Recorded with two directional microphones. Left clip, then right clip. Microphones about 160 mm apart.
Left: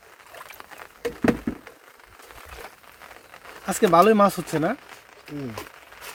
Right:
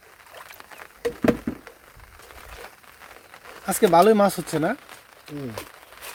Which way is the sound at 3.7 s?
10° left (ahead or behind).